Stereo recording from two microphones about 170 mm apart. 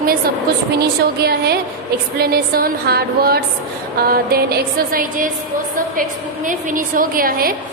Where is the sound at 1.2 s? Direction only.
70° right (ahead or behind).